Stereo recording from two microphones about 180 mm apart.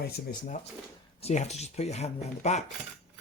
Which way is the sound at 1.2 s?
40° left (ahead or behind).